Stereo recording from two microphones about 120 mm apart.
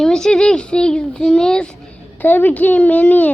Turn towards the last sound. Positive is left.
turn(degrees=10)  # may be behind; listen again after turning